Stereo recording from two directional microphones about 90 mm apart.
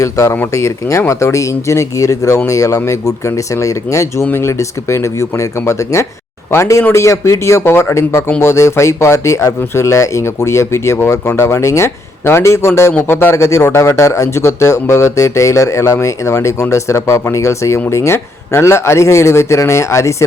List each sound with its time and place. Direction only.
0.0 s speech: 35° left (ahead or behind)